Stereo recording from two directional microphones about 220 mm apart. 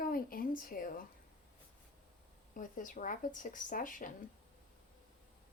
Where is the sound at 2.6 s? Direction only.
40° left (ahead or behind).